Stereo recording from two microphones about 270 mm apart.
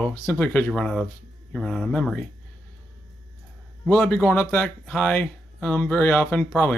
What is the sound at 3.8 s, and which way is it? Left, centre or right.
Speech, centre.